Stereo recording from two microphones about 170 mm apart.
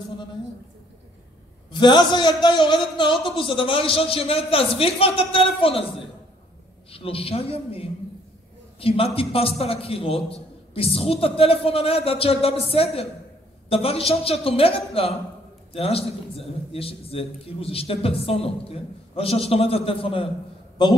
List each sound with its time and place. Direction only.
1.7 s a man's voice: 25° left (ahead or behind)